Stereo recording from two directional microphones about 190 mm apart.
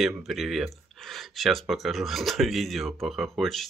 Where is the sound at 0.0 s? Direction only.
Centre (ahead or behind).